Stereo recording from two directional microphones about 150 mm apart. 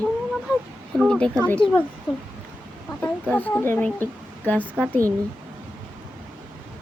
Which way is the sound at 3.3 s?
15° left (ahead or behind).